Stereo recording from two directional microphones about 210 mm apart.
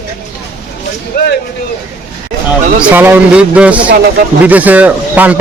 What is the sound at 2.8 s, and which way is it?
A man's voice, 10° right (ahead or behind).